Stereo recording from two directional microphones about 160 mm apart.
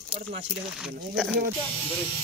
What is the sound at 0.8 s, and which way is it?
Speech, centre (ahead or behind).